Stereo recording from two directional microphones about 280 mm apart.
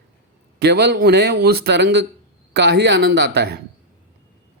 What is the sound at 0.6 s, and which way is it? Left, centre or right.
Speech, right.